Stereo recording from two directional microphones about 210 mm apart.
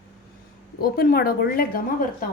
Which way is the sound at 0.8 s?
45° left (ahead or behind).